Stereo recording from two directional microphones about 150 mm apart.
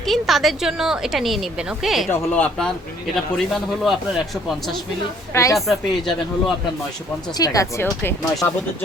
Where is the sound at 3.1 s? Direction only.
Centre (ahead or behind).